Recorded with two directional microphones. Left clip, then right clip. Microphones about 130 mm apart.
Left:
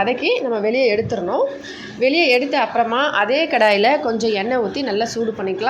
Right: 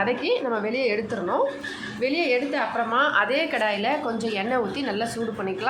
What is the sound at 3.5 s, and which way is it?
Speech, 50° left (ahead or behind).